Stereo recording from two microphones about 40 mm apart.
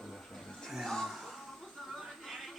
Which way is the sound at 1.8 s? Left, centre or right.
Centre.